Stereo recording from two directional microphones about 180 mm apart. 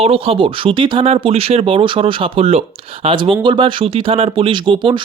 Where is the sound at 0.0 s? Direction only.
30° right (ahead or behind).